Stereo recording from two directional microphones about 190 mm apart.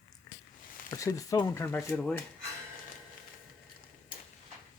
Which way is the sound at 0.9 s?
15° left (ahead or behind).